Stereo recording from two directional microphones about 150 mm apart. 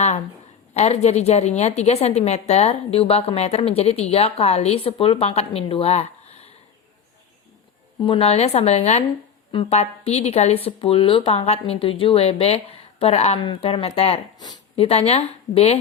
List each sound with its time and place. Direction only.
0.7 s a woman's voice: 50° left (ahead or behind)
8.0 s a woman's voice: 40° left (ahead or behind)
14.3 s speech: 30° left (ahead or behind)
14.8 s a woman's voice: 45° left (ahead or behind)